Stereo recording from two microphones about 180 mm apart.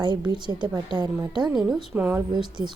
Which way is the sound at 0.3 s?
25° right (ahead or behind).